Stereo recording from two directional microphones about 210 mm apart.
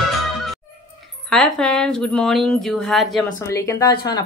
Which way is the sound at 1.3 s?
5° left (ahead or behind).